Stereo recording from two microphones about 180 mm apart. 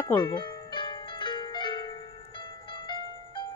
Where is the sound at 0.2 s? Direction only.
25° left (ahead or behind).